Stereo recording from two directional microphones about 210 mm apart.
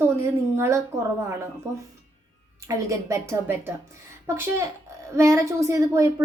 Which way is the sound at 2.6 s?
15° right (ahead or behind).